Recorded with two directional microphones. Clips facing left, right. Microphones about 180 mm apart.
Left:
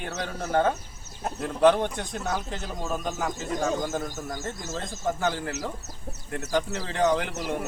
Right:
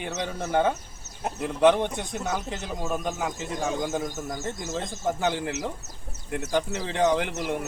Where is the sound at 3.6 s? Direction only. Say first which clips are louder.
Left 1 dB; 15° right (ahead or behind).